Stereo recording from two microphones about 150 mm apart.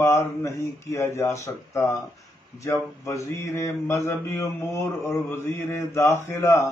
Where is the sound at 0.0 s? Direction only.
20° left (ahead or behind).